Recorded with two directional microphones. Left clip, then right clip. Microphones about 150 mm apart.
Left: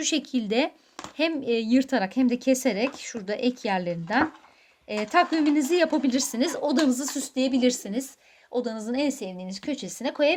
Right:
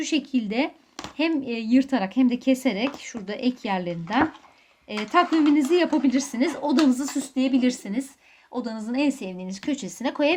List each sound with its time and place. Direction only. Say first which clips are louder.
0.0 s speech: right 1 dB; 35° left (ahead or behind)